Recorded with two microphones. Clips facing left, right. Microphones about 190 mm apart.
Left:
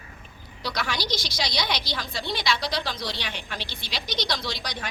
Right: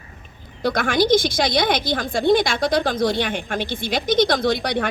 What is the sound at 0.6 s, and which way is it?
A woman's voice, 50° right (ahead or behind).